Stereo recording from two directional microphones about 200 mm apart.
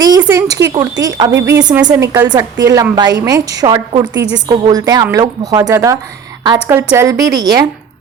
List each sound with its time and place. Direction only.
0.2 s a woman's voice: 15° right (ahead or behind)